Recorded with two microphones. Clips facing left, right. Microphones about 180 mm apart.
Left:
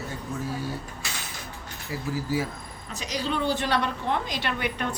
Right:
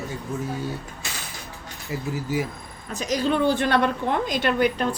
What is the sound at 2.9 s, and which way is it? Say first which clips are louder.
A woman's voice: right 6 dB; 50° right (ahead or behind).